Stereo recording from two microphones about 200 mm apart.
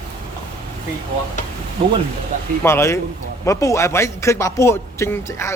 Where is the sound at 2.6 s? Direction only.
15° left (ahead or behind).